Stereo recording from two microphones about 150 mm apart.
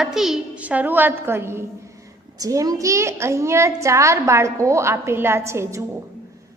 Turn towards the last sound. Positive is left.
turn(degrees=-20)  # may be behind; listen again after turning